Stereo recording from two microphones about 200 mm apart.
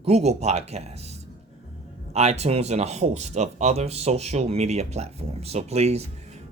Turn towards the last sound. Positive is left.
turn(degrees=-35)  # may be behind; listen again after turning